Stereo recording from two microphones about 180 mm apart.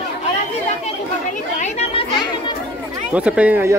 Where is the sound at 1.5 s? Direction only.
40° left (ahead or behind).